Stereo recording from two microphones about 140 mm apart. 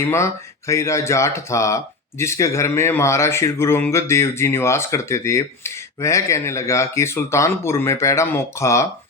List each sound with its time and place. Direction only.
0.7 s speech: 20° left (ahead or behind)